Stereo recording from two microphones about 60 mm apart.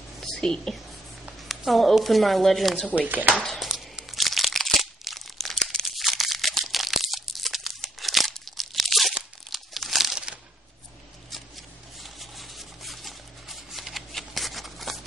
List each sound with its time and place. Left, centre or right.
0.2 s a woman's voice: centre
2.9 s speech: right
3.5 s crunch: centre
9.5 s crumpling: centre
10.1 s a sound: centre
12.0 s a sound: centre